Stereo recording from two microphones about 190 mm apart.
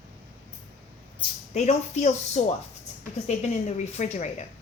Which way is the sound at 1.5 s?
35° left (ahead or behind).